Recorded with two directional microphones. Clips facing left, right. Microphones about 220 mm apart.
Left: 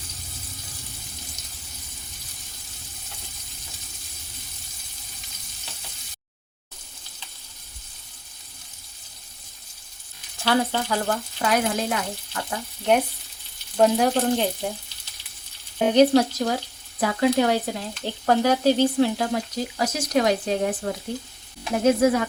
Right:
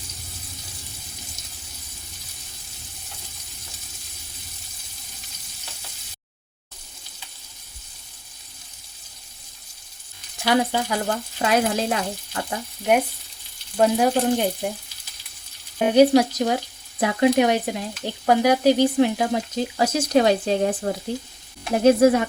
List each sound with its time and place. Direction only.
10.4 s speech: 15° right (ahead or behind)
11.4 s frying: 25° right (ahead or behind)
13.7 s frying: centre (ahead or behind)
14.2 s speech: 10° right (ahead or behind)
15.8 s speech: 10° right (ahead or behind)
17.0 s frying: 20° right (ahead or behind)